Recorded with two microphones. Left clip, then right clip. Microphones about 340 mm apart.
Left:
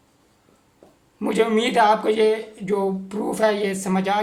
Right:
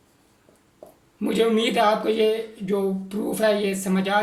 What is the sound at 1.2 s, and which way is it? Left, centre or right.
Speech, centre.